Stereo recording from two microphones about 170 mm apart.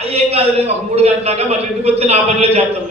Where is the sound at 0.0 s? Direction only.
35° right (ahead or behind).